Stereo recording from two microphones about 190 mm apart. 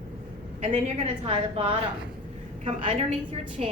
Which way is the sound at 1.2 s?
30° right (ahead or behind).